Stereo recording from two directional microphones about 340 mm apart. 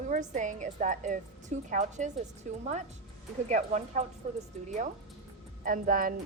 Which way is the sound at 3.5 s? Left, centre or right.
Right.